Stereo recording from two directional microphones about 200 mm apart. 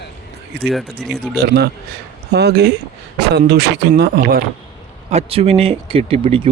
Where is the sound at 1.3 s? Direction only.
50° right (ahead or behind).